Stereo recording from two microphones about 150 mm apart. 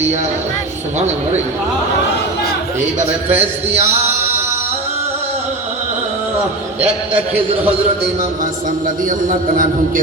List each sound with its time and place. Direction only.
0.9 s speech: 50° right (ahead or behind)
3.2 s speech: 45° right (ahead or behind)
9.0 s a man's voice: 65° right (ahead or behind)